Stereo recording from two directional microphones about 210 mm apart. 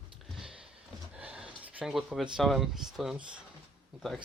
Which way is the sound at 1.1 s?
5° right (ahead or behind).